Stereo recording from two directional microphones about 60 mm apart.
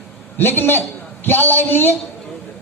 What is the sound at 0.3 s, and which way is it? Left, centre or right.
A man's voice, left.